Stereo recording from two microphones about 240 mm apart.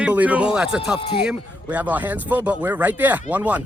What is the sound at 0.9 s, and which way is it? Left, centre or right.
Speech, centre.